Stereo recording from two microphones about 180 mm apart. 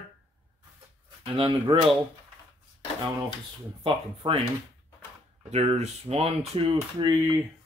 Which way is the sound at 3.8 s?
30° right (ahead or behind).